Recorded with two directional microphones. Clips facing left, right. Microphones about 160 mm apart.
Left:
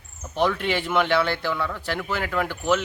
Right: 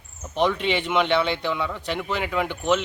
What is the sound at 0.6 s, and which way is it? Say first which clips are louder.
Speech: right 1 dB; 5° left (ahead or behind).